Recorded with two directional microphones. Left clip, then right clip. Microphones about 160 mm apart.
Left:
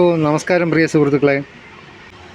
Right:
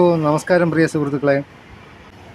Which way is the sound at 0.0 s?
10° left (ahead or behind).